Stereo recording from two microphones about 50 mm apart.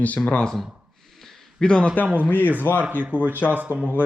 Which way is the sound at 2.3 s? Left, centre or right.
Left.